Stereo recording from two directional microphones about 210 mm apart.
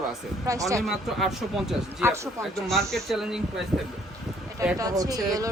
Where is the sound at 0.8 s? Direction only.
Centre (ahead or behind).